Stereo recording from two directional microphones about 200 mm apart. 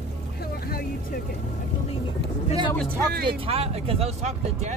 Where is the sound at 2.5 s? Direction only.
25° left (ahead or behind).